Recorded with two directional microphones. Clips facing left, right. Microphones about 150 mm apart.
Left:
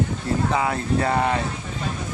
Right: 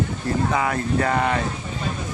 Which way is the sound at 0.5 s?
25° left (ahead or behind).